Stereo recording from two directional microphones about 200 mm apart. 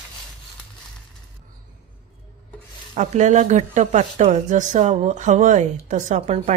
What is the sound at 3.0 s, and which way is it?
Speech, 35° right (ahead or behind).